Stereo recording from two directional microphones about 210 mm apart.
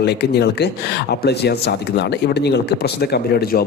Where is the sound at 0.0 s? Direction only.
50° left (ahead or behind).